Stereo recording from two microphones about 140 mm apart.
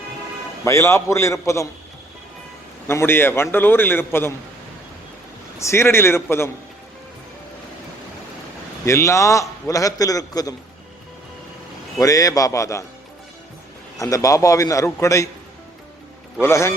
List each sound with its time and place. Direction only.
0.6 s a man's voice: 20° left (ahead or behind)
2.8 s a man's voice: 15° left (ahead or behind)
5.5 s a man's voice: 20° left (ahead or behind)
8.8 s a man's voice: 20° left (ahead or behind)
11.9 s a man's voice: 25° left (ahead or behind)
14.0 s a man's voice: 25° left (ahead or behind)
16.4 s a man's voice: 20° left (ahead or behind)